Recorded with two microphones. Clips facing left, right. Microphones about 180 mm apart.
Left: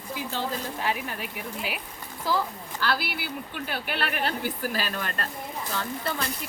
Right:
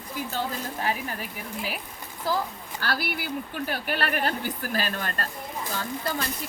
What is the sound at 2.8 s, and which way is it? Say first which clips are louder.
Speech: left 1 dB; 50° right (ahead or behind).